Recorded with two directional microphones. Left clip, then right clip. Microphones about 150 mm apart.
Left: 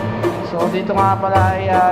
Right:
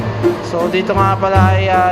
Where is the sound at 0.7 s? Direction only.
25° right (ahead or behind).